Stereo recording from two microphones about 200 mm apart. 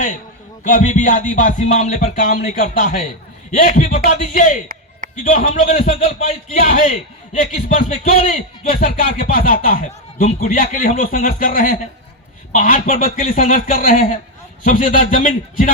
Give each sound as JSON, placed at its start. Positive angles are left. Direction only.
{"t": 0.6, "sound": "music", "side_deg": 35}
{"t": 3.6, "sound": "a man's voice", "side_deg": 45}
{"t": 5.1, "sound": "music", "side_deg": 40}
{"t": 7.8, "sound": "music", "side_deg": 30}
{"t": 8.7, "sound": "speech", "side_deg": 30}
{"t": 9.1, "sound": "a man's voice", "side_deg": 45}
{"t": 14.6, "sound": "music", "side_deg": 40}